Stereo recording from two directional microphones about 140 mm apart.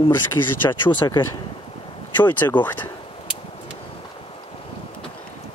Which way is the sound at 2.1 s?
10° left (ahead or behind).